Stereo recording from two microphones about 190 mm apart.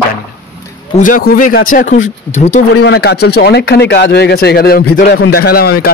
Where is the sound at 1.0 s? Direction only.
45° left (ahead or behind).